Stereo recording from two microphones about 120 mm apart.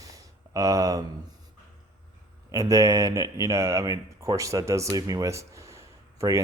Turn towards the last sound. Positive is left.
turn(degrees=-25)  # may be behind; listen again after turning